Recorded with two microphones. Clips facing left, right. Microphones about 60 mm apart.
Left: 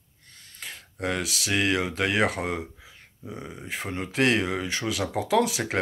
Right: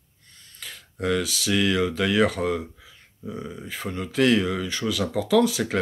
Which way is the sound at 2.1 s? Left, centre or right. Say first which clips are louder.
Right 3 dB; left.